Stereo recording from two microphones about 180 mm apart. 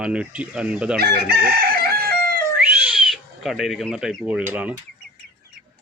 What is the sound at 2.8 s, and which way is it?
Speech, 5° right (ahead or behind).